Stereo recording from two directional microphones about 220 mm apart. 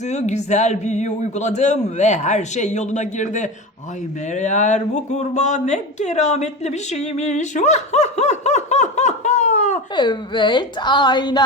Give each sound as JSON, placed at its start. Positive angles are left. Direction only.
{"t": 0.0, "sound": "speech", "side_deg": 30}
{"t": 9.9, "sound": "a woman's voice", "side_deg": 20}